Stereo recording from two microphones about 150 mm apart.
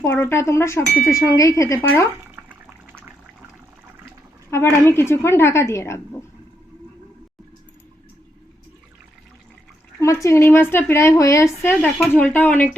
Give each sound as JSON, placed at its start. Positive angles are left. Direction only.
{"t": 0.1, "sound": "a woman's voice", "side_deg": 15}
{"t": 2.3, "sound": "water", "side_deg": -10}
{"t": 4.5, "sound": "a woman's voice", "side_deg": 15}
{"t": 10.0, "sound": "a woman's voice", "side_deg": 20}